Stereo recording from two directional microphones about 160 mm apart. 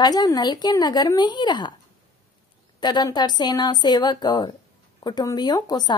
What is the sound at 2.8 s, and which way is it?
A woman's voice, 25° left (ahead or behind).